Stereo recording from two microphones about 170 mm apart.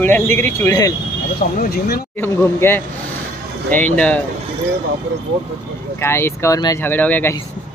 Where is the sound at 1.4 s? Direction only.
60° left (ahead or behind).